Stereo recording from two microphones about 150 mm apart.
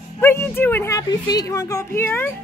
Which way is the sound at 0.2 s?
15° left (ahead or behind).